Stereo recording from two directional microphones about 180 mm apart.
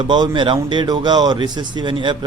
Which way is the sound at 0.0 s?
25° right (ahead or behind).